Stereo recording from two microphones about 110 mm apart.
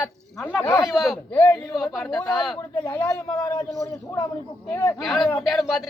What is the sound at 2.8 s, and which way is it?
Speech, 15° left (ahead or behind).